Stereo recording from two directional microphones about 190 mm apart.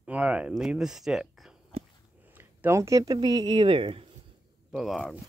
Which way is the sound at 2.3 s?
10° right (ahead or behind).